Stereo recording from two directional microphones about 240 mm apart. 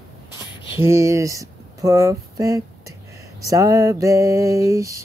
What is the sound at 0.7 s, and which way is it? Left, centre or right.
Speech, centre.